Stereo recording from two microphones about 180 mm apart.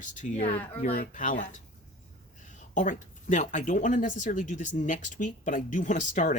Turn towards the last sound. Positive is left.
turn(degrees=45)  # may be behind; listen again after turning